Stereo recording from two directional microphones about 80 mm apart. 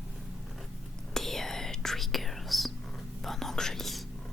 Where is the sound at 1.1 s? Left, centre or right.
Centre.